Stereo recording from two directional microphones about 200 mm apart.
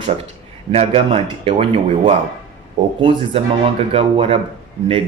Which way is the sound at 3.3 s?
30° right (ahead or behind).